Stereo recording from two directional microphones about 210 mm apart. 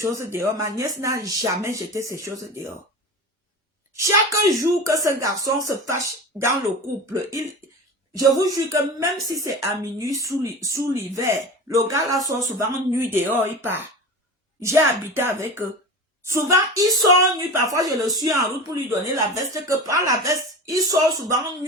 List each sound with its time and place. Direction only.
0.0 s speech: 15° right (ahead or behind)
3.9 s speech: 15° right (ahead or behind)